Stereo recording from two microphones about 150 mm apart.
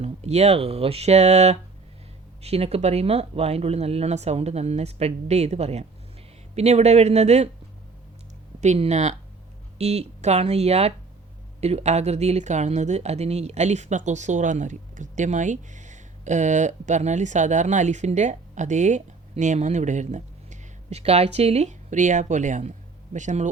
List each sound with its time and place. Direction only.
0.0 s speech: 45° right (ahead or behind)
8.6 s speech: 50° right (ahead or behind)